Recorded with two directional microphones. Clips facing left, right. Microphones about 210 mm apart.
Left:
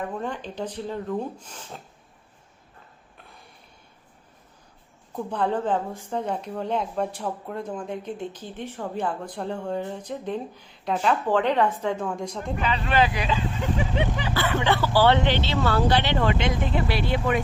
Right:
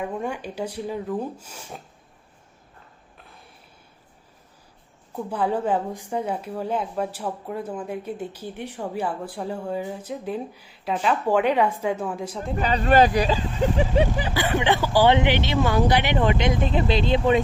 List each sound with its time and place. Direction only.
0.0 s a woman's voice: 10° right (ahead or behind)
3.2 s a sound: centre (ahead or behind)
5.1 s a woman's voice: 5° right (ahead or behind)
12.5 s speech: 40° right (ahead or behind)
14.3 s a woman's voice: 15° right (ahead or behind)